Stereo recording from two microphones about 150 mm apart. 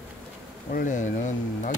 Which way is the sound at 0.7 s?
60° left (ahead or behind).